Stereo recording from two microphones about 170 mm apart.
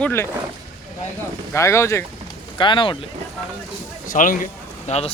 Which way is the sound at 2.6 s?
30° left (ahead or behind).